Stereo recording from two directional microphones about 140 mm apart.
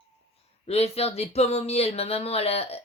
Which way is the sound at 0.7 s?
50° left (ahead or behind).